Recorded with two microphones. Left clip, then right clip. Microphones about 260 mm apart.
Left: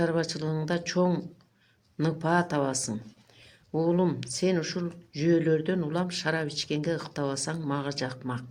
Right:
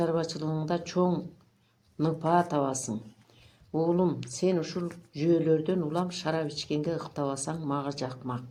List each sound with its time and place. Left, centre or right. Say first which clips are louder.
0.0 s speech: left 1 dB; left